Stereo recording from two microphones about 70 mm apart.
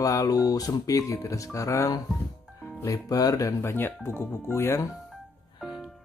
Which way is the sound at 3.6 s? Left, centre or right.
Left.